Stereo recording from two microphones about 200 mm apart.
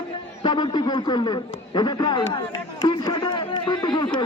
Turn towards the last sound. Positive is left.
turn(degrees=25)  # may be behind; listen again after turning